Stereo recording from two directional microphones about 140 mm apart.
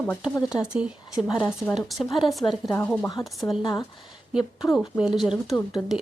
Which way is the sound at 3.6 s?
25° left (ahead or behind).